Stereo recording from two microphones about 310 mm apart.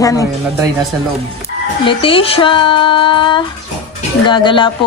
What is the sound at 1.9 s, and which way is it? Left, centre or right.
Speech, centre.